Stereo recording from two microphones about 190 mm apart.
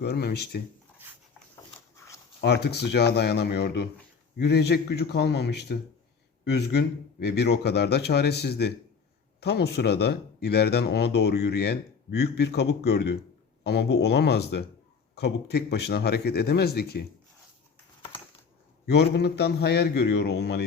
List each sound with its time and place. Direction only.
0.0 s speech: 60° left (ahead or behind)
0.9 s dog: 10° right (ahead or behind)
2.0 s a sound: 15° left (ahead or behind)
2.4 s speech: 60° left (ahead or behind)
18.9 s speech: 60° left (ahead or behind)